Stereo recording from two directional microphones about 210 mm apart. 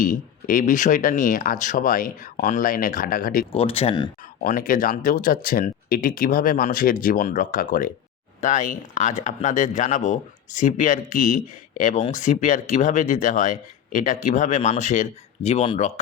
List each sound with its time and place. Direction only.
0.0 s speech: 40° left (ahead or behind)
3.5 s speech: 25° left (ahead or behind)
4.4 s speech: 40° left (ahead or behind)